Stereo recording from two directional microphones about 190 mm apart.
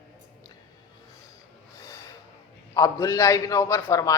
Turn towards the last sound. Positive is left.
turn(degrees=15)  # may be behind; listen again after turning